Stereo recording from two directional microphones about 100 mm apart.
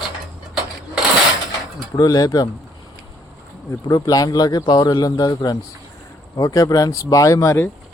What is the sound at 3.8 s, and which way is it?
Speech, 40° left (ahead or behind).